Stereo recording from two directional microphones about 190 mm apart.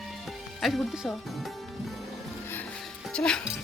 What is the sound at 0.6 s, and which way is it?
Speech, centre (ahead or behind).